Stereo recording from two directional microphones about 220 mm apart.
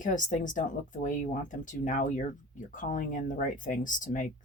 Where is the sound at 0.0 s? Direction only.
35° left (ahead or behind).